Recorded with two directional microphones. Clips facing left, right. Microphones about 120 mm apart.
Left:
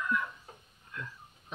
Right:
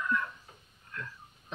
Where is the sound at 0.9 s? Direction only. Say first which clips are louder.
Even; 20° left (ahead or behind).